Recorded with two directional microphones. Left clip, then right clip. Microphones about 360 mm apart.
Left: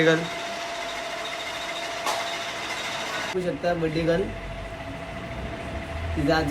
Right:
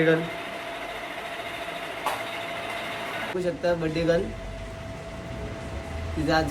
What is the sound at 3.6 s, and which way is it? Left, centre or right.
Speech, centre.